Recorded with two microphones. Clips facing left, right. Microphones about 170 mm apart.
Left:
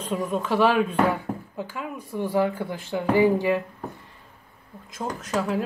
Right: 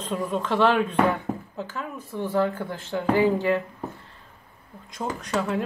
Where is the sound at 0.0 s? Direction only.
5° left (ahead or behind).